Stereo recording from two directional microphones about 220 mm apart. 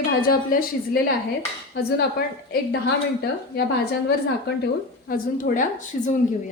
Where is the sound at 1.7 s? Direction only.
45° left (ahead or behind).